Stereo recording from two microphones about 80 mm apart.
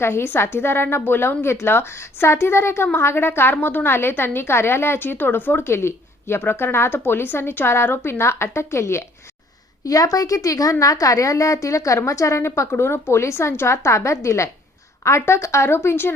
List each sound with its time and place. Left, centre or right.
0.0 s a woman's voice: left
9.8 s a woman's voice: left